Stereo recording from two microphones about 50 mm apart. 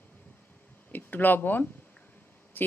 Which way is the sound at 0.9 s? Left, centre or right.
Left.